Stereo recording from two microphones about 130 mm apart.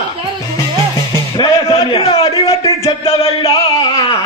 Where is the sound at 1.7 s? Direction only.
40° left (ahead or behind).